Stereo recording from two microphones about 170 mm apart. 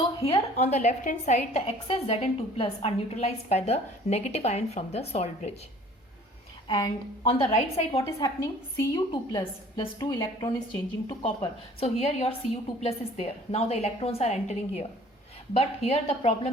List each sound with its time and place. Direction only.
0.0 s a woman's voice: 35° left (ahead or behind)
6.7 s a woman's voice: 25° left (ahead or behind)
7.3 s a woman's voice: 35° left (ahead or behind)
8.2 s a woman's voice: 20° left (ahead or behind)
11.2 s a woman's voice: 35° left (ahead or behind)